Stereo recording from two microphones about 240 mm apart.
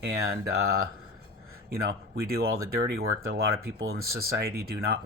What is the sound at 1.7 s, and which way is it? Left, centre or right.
Speech, right.